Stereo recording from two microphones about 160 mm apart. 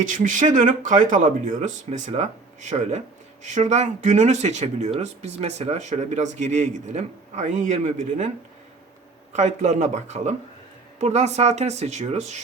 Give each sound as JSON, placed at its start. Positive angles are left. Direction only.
{"t": 0.0, "sound": "speech", "side_deg": -55}
{"t": 9.3, "sound": "speech", "side_deg": -45}